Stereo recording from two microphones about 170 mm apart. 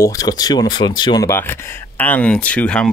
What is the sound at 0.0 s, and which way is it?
Speech, 20° left (ahead or behind).